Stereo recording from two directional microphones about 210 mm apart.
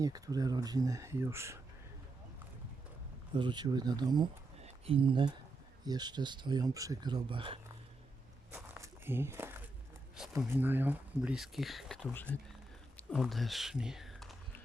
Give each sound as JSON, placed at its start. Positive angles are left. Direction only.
{"t": 0.0, "sound": "speech", "side_deg": -15}
{"t": 3.3, "sound": "speech", "side_deg": -20}
{"t": 8.5, "sound": "walk", "side_deg": -10}
{"t": 10.3, "sound": "speech", "side_deg": -10}